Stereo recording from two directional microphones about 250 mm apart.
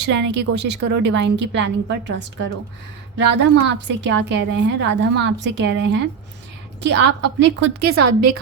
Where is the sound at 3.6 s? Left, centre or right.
Right.